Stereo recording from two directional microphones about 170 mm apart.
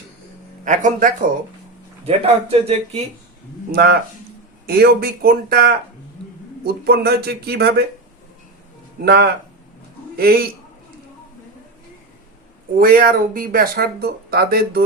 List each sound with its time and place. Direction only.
0.6 s speech: 50° right (ahead or behind)
2.0 s speech: 35° right (ahead or behind)
3.7 s speech: 65° right (ahead or behind)
9.0 s speech: 70° right (ahead or behind)
12.8 s speech: 60° right (ahead or behind)